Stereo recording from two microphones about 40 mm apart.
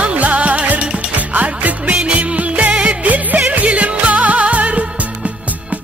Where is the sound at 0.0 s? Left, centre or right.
Right.